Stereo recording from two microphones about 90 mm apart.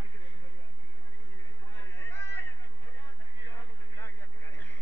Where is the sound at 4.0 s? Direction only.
20° left (ahead or behind).